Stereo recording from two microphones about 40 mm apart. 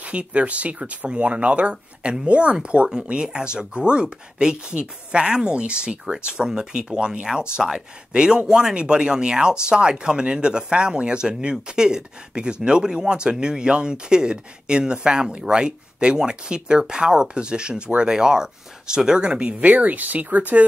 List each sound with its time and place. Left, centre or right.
0.0 s speech: right